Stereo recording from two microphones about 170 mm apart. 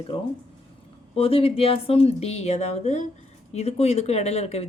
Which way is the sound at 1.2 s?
35° left (ahead or behind).